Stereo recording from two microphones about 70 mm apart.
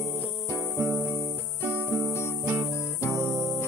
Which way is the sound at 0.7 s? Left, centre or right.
Right.